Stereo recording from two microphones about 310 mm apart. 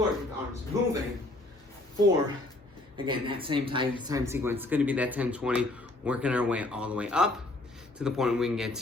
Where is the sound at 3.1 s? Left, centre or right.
Centre.